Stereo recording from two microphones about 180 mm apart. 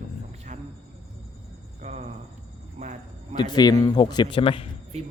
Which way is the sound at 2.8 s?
40° right (ahead or behind).